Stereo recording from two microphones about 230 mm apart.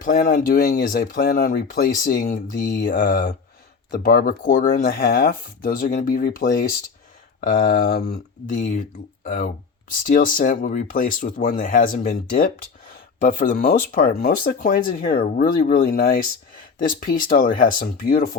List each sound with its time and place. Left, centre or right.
0.0 s speech: left